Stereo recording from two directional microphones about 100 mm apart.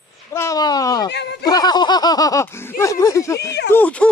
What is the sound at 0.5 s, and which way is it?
Snicker, 40° left (ahead or behind).